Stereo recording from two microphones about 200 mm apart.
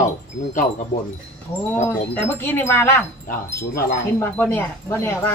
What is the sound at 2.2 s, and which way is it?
Speech, 10° left (ahead or behind).